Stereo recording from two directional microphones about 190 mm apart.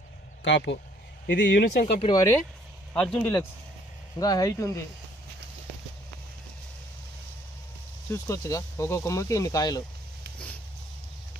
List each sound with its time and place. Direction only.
0.4 s speech: 70° left (ahead or behind)
1.8 s speech: 30° left (ahead or behind)
2.1 s speech: 15° left (ahead or behind)
8.1 s speech: 15° left (ahead or behind)